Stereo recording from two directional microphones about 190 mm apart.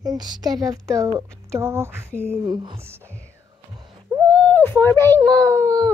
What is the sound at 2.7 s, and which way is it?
Speech, 15° right (ahead or behind).